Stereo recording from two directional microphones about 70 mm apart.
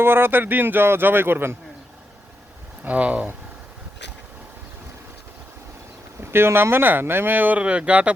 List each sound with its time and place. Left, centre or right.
0.0 s speech: right
2.8 s speech: right
6.3 s speech: right; by 8.1 s centre